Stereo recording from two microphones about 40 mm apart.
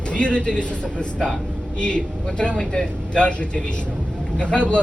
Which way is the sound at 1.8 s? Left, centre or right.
Left.